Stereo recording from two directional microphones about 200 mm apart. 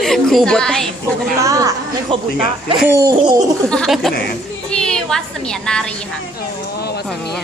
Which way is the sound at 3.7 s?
Centre (ahead or behind).